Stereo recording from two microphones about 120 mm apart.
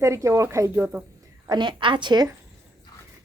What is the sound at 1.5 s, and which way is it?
Speech, 40° right (ahead or behind).